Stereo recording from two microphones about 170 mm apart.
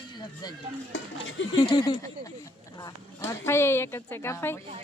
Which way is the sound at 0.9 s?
90° left.